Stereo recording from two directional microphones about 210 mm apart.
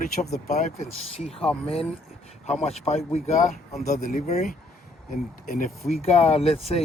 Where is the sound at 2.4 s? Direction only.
30° left (ahead or behind).